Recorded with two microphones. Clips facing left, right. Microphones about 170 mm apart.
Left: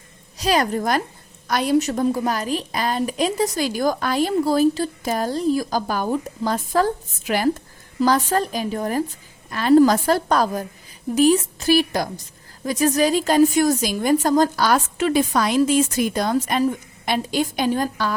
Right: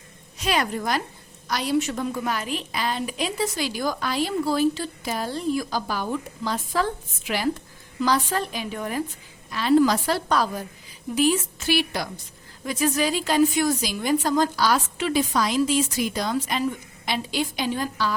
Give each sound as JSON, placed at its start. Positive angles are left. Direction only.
{"t": 0.3, "sound": "a woman's voice", "side_deg": 40}